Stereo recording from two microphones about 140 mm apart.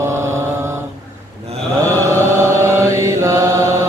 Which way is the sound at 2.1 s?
20° right (ahead or behind).